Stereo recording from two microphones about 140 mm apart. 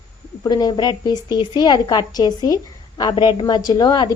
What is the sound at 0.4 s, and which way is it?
A woman's voice, 30° left (ahead or behind).